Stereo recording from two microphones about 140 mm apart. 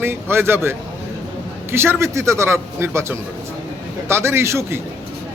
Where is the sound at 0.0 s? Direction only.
15° right (ahead or behind).